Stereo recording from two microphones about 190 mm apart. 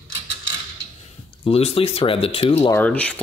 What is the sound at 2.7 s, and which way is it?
Speech, 10° left (ahead or behind).